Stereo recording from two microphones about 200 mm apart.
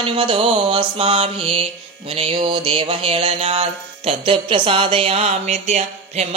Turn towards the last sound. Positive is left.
turn(degrees=-35)  # may be behind; listen again after turning